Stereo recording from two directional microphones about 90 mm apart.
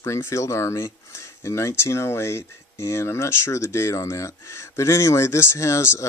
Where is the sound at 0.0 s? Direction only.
30° left (ahead or behind).